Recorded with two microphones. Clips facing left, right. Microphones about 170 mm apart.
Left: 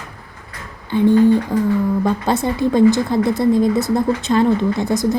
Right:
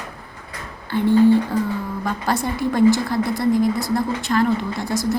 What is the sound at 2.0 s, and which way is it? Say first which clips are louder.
A woman's voice: left 5 dB; 20° left (ahead or behind).